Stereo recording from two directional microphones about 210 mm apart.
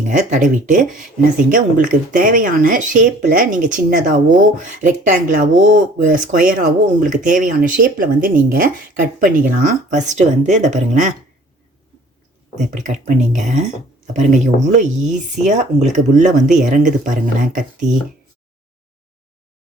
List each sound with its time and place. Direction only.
0.1 s speech: 40° right (ahead or behind)
5.3 s speech: 40° right (ahead or behind)
12.5 s speech: 35° right (ahead or behind)